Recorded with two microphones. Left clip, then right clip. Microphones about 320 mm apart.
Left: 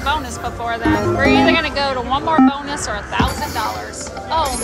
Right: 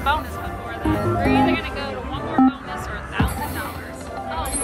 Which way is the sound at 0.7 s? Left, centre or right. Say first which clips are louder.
Left 5 dB; left.